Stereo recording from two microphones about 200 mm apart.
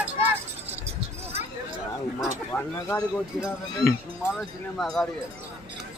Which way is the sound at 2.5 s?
10° left (ahead or behind).